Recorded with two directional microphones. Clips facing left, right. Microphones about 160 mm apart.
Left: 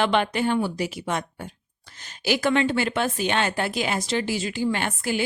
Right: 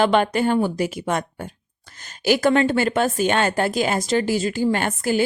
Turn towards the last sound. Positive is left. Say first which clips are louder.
# right 5 dB
turn(degrees=-45)  # may be behind; listen again after turning